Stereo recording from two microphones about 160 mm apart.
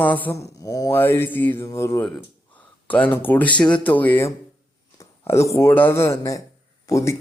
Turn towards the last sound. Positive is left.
turn(degrees=20)  # may be behind; listen again after turning